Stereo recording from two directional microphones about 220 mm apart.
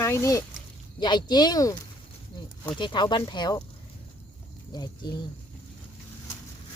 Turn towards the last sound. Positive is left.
turn(degrees=20)  # may be behind; listen again after turning